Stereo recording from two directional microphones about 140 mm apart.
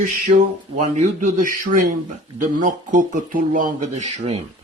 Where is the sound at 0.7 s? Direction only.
60° right (ahead or behind); by 1.8 s 80° right.